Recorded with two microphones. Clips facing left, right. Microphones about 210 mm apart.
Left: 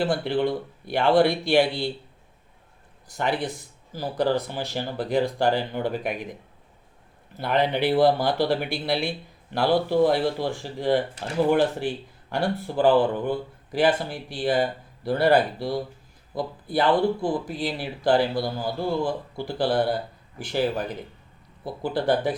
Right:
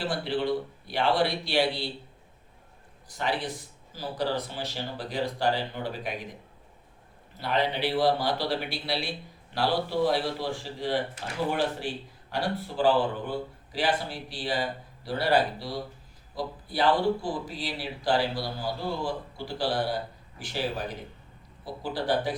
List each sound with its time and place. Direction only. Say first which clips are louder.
0.0 s speech: left 5 dB; 50° left (ahead or behind)
3.2 s speech: left 4 dB; 50° left (ahead or behind)
7.3 s speech: left 5 dB; 55° left (ahead or behind)
12.3 s speech: left 5 dB; 50° left (ahead or behind)